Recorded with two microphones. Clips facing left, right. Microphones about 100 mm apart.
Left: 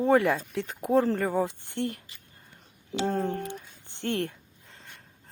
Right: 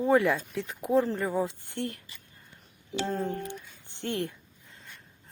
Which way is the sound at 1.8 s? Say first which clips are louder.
Left 3 dB; 30° left (ahead or behind).